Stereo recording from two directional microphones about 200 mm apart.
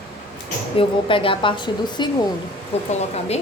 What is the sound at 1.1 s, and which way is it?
Speech, 25° left (ahead or behind).